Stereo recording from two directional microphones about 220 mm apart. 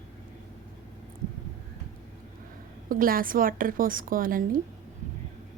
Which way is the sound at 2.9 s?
40° right (ahead or behind).